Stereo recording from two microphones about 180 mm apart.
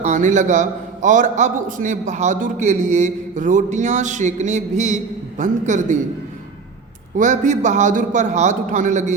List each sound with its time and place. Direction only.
0.0 s a man's voice: 45° right (ahead or behind)
7.2 s a man's voice: 45° right (ahead or behind)